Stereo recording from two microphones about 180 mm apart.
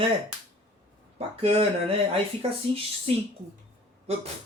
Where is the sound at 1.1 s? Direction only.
35° right (ahead or behind).